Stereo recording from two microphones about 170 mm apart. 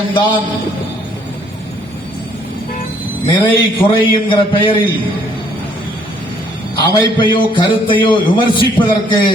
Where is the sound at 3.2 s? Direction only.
30° left (ahead or behind).